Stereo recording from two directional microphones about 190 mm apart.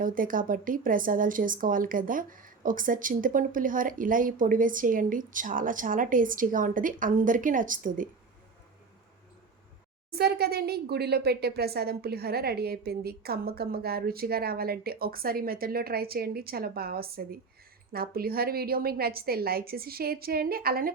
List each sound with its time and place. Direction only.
0.0 s a woman's voice: 45° right (ahead or behind)
10.2 s a woman's voice: 55° right (ahead or behind)